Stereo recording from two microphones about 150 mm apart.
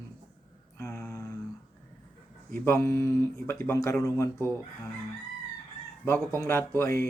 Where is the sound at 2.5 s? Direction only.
15° left (ahead or behind).